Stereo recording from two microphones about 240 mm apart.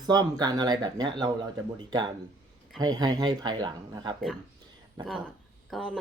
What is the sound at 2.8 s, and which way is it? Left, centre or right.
Speech, centre.